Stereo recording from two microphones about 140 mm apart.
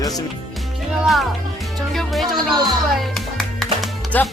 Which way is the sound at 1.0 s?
Centre (ahead or behind).